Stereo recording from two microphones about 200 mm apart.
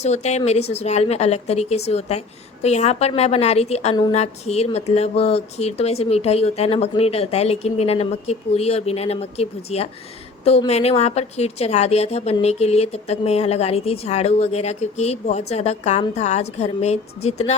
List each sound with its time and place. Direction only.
0.0 s a woman's voice: 35° left (ahead or behind)